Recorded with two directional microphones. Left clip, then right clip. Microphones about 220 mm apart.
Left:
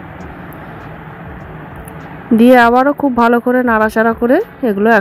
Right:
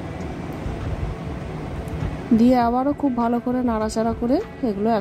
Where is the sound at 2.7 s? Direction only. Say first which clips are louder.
Left 10 dB; 45° left (ahead or behind).